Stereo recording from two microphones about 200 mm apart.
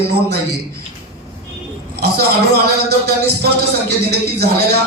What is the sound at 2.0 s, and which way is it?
Speech, 50° right (ahead or behind).